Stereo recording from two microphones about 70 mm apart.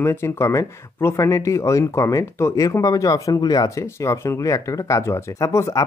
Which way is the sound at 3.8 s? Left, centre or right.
Left.